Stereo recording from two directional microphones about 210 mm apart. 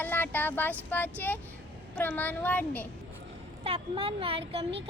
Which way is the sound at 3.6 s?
25° right (ahead or behind).